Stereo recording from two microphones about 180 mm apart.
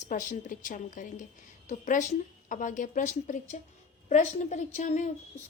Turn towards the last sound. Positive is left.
turn(degrees=40)  # may be behind; listen again after turning